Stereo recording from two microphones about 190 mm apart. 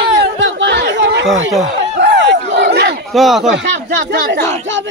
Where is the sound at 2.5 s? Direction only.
60° right (ahead or behind).